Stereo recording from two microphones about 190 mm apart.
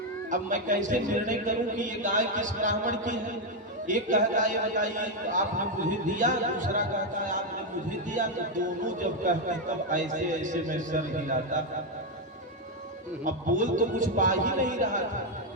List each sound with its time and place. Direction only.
0.3 s a man's voice: 45° right (ahead or behind)
13.2 s speech: 40° right (ahead or behind)